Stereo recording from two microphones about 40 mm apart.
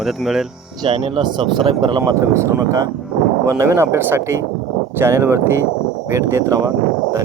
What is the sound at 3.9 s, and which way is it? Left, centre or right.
Speech, right.